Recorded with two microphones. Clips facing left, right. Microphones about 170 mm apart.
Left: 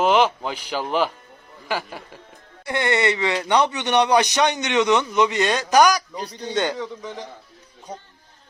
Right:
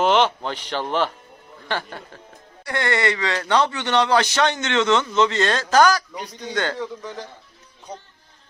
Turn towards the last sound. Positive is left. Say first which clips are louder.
# even
turn(degrees=0)  # may be behind; listen again after turning